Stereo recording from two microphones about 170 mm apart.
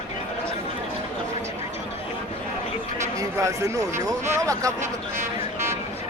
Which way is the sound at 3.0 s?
20° right (ahead or behind).